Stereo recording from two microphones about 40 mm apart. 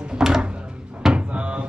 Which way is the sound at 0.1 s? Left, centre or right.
Centre.